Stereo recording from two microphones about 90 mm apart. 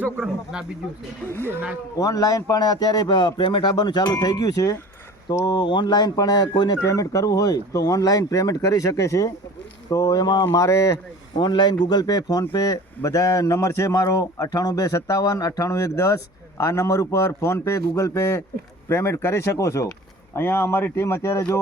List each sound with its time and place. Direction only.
0.0 s speech: 15° right (ahead or behind)
2.0 s a man's voice: 40° left (ahead or behind)
5.5 s a man's voice: 60° left (ahead or behind)
6.8 s a man's voice: 40° left (ahead or behind)
10.6 s a man's voice: 40° left (ahead or behind)
11.3 s a man's voice: 55° left (ahead or behind); by 21.4 s 30° left (ahead or behind)